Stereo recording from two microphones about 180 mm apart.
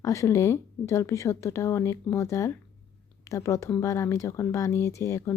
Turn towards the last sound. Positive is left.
turn(degrees=15)  # may be behind; listen again after turning